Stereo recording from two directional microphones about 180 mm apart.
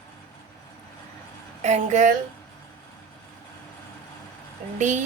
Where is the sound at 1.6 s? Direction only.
40° right (ahead or behind).